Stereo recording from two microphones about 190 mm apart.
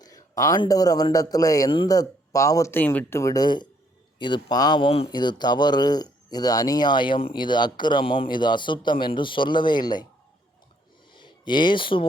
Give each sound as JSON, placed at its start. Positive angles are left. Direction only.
{"t": 0.0, "sound": "a man's voice", "side_deg": 20}
{"t": 11.2, "sound": "speech", "side_deg": 25}